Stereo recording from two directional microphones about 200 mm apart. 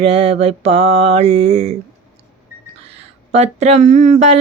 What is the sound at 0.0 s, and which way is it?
A woman's voice, 30° right (ahead or behind).